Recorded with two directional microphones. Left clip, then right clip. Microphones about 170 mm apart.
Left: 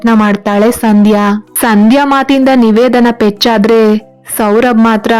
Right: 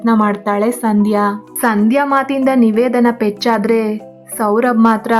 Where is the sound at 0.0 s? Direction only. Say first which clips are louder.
Left 4 dB; 30° left (ahead or behind).